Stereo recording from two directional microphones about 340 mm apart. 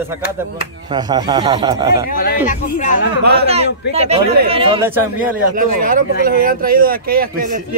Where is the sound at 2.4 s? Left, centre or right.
Left.